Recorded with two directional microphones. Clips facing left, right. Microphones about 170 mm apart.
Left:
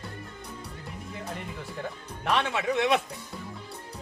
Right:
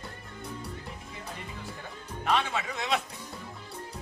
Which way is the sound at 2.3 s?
65° left (ahead or behind).